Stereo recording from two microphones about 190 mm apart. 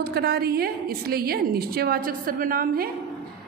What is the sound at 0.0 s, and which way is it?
A woman's voice, 55° right (ahead or behind).